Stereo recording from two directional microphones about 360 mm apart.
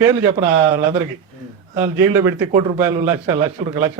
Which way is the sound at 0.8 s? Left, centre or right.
Centre.